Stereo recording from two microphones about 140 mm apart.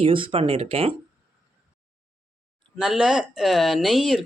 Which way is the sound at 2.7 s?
5° right (ahead or behind).